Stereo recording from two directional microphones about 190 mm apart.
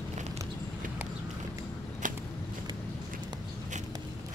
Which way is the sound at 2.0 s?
45° right (ahead or behind).